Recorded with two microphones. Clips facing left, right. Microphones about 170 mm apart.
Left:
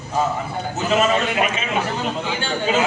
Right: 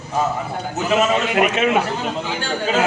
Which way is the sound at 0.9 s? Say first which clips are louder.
Right 1 dB; 5° right (ahead or behind).